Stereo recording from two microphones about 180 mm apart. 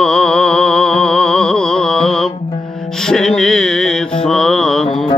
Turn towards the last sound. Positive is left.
turn(degrees=5)  # may be behind; listen again after turning